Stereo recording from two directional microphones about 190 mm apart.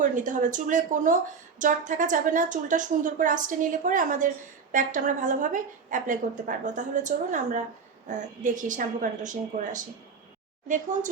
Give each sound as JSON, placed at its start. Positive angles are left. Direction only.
{"t": 0.0, "sound": "a woman's voice", "side_deg": -40}